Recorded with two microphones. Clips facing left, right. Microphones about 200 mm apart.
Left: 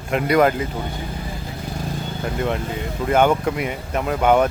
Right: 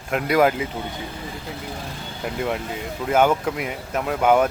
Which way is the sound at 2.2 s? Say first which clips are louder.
Left 1 dB; 5° right (ahead or behind).